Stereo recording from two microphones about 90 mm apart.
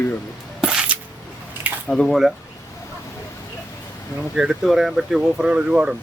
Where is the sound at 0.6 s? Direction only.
10° right (ahead or behind).